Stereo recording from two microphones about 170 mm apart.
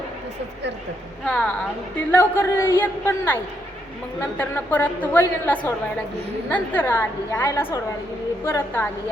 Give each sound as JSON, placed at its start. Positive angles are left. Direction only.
{"t": 1.2, "sound": "a woman's voice", "side_deg": 5}